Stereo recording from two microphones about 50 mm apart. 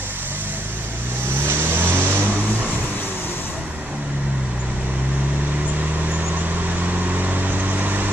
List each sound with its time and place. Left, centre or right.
1.5 s vehicle: right
7.2 s vehicle: right